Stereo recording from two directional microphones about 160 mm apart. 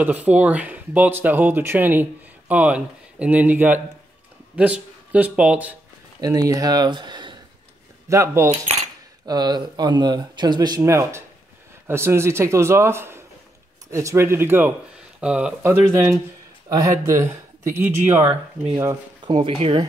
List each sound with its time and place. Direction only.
0.0 s speech: 10° right (ahead or behind)
6.2 s speech: 20° right (ahead or behind)
19.2 s speech: 35° right (ahead or behind)